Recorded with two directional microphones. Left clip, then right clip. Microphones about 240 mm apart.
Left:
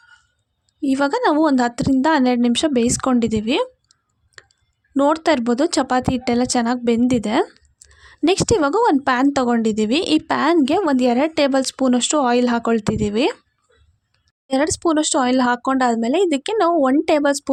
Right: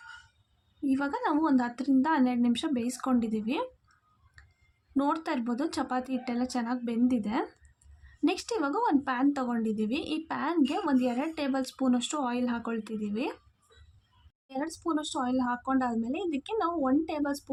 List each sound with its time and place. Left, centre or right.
0.9 s a woman's voice: left
4.9 s a woman's voice: left
14.4 s a woman's voice: left